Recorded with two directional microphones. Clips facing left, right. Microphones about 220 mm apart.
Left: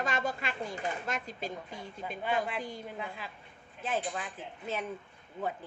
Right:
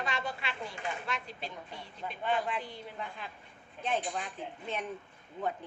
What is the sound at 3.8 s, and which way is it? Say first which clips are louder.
Speech: even; 5° left (ahead or behind).